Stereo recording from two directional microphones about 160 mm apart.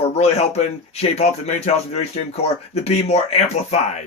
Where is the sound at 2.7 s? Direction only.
40° left (ahead or behind).